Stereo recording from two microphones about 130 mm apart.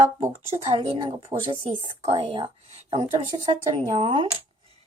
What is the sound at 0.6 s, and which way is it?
A woman's voice, 50° right (ahead or behind).